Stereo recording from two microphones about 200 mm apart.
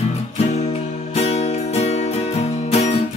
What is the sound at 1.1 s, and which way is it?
Music, 30° left (ahead or behind).